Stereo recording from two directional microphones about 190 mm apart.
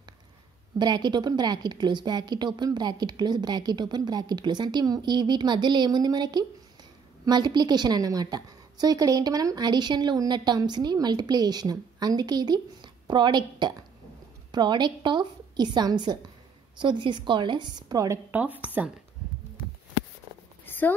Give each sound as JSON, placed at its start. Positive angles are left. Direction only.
{"t": 0.7, "sound": "a woman's voice", "side_deg": -20}